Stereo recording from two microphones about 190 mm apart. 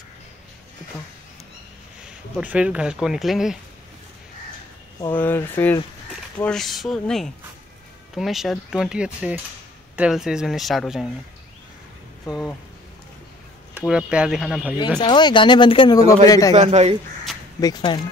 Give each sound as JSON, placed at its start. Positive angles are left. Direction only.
{"t": 2.0, "sound": "speech", "side_deg": -5}
{"t": 5.1, "sound": "speech", "side_deg": 10}
{"t": 12.3, "sound": "speech", "side_deg": 0}
{"t": 13.7, "sound": "speech", "side_deg": -5}
{"t": 15.0, "sound": "speech", "side_deg": 25}
{"t": 16.5, "sound": "speech", "side_deg": -35}
{"t": 17.6, "sound": "speech", "side_deg": 20}